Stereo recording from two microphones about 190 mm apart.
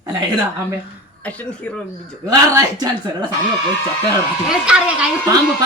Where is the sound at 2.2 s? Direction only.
20° right (ahead or behind).